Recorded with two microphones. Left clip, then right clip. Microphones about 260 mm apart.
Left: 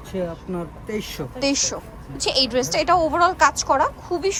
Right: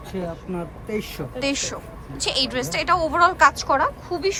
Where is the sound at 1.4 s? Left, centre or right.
Centre.